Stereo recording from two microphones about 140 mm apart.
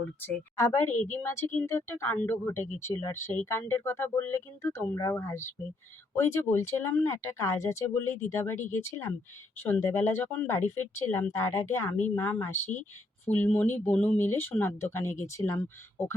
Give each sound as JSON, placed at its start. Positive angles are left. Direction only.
{"t": 0.2, "sound": "speech", "side_deg": 20}